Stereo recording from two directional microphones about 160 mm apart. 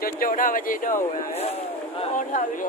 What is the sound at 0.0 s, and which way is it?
Speech, 60° left (ahead or behind).